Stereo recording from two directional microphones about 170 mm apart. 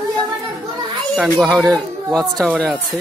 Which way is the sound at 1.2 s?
Centre (ahead or behind).